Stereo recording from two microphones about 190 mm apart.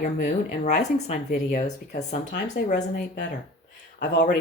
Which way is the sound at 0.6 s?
40° left (ahead or behind).